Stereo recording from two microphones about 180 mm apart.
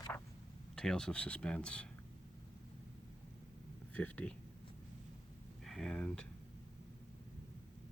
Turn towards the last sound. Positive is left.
turn(degrees=5)  # may be behind; listen again after turning